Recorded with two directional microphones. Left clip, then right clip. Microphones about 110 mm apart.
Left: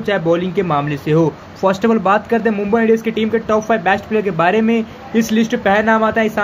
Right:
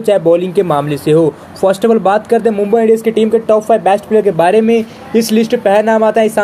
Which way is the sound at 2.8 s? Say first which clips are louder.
Right 6 dB; 30° right (ahead or behind).